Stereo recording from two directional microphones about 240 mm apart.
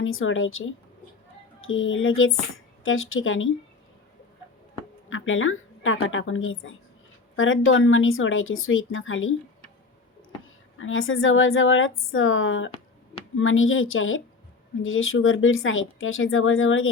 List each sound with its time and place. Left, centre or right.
0.0 s speech: left
5.0 s speech: left
10.8 s speech: left